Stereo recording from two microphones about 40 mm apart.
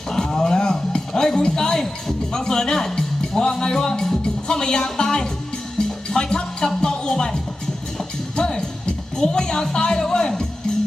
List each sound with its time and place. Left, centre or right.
0.1 s a sound: centre
1.4 s speech: centre
6.1 s music: left
6.8 s speech: centre
7.9 s music: centre
9.1 s speech: centre